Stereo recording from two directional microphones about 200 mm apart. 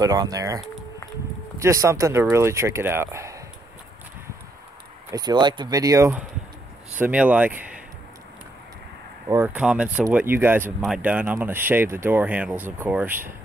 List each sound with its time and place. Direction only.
0.0 s speech: 20° right (ahead or behind)
1.6 s speech: 15° right (ahead or behind)
5.1 s speech: 20° right (ahead or behind)
9.3 s speech: 10° right (ahead or behind)